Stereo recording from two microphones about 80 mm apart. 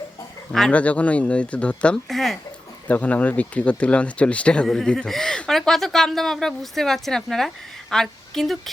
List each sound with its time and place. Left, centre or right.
0.7 s speech: centre
2.0 s speech: centre
2.8 s speech: centre